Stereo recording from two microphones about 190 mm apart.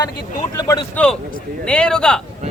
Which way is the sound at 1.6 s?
5° left (ahead or behind).